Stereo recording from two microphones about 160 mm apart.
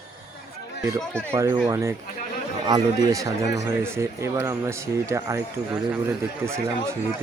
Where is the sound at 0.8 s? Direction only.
15° right (ahead or behind).